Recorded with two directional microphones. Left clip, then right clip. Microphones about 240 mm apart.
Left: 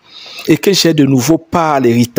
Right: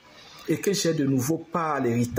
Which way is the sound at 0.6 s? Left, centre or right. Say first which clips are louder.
Left 13 dB; left.